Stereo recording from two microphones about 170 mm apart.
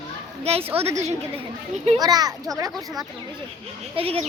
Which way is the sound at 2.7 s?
Centre (ahead or behind).